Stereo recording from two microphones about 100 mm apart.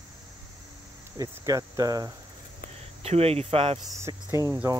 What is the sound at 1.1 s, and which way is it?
Cricket, 35° right (ahead or behind).